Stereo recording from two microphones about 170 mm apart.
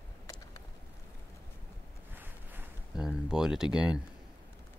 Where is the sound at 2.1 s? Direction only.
10° right (ahead or behind).